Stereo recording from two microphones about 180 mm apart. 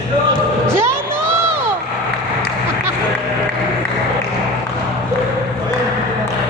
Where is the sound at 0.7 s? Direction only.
15° right (ahead or behind).